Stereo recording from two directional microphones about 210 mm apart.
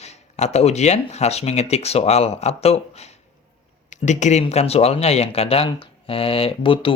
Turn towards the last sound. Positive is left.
turn(degrees=25)  # may be behind; listen again after turning